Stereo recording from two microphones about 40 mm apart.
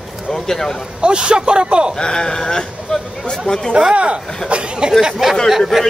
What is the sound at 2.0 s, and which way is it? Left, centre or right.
Speech, centre.